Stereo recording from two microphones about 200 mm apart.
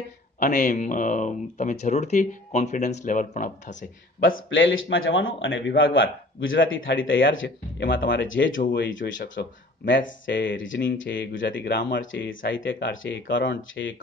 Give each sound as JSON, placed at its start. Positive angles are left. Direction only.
{"t": 0.4, "sound": "speech", "side_deg": 40}
{"t": 4.5, "sound": "a man's voice", "side_deg": 75}